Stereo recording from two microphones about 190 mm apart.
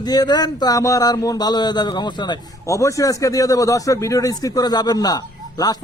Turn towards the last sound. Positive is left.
turn(degrees=20)  # may be behind; listen again after turning